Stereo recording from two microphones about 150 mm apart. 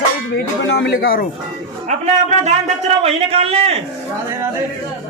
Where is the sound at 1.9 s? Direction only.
50° right (ahead or behind).